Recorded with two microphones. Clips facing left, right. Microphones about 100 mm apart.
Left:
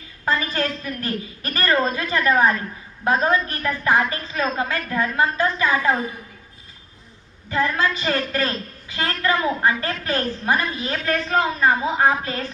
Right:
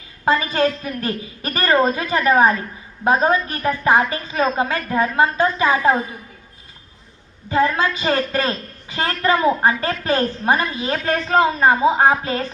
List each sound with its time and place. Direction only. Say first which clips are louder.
0.3 s a woman's voice: right 5 dB; 20° right (ahead or behind)
7.5 s a woman's voice: right 3 dB; 20° right (ahead or behind)